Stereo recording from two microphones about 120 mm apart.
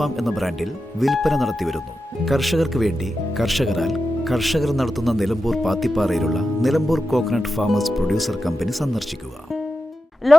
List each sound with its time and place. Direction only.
0.0 s speech: centre (ahead or behind)
10.3 s speech: centre (ahead or behind)